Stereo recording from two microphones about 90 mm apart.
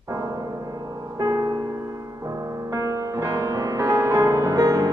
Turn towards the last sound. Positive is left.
turn(degrees=-40)  # may be behind; listen again after turning